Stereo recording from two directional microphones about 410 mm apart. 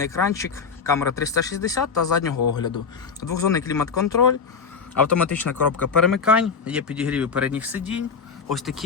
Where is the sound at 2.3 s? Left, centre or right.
Left.